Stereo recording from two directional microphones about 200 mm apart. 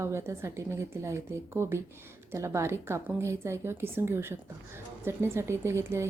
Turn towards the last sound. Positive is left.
turn(degrees=-15)  # may be behind; listen again after turning